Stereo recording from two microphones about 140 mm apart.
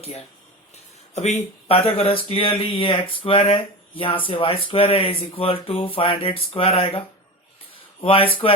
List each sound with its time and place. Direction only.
0.0 s speech: 45° left (ahead or behind)
8.0 s speech: 40° left (ahead or behind)